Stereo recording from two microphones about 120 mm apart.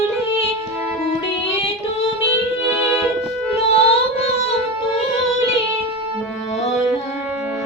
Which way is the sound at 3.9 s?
60° left (ahead or behind).